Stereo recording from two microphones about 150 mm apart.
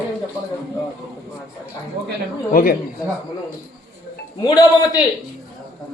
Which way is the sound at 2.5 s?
70° left (ahead or behind).